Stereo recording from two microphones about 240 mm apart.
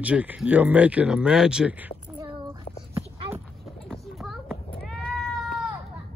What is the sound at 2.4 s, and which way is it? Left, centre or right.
Child singing, centre.